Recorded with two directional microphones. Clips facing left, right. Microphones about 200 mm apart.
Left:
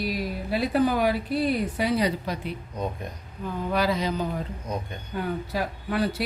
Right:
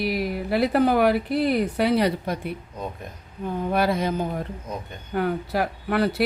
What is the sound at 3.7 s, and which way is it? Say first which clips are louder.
Speech: right 2 dB; 55° right (ahead or behind).